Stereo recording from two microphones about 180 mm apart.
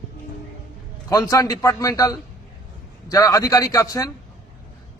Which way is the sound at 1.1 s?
20° left (ahead or behind).